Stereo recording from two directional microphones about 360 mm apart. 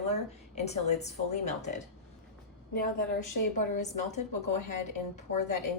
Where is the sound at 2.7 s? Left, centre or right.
Left.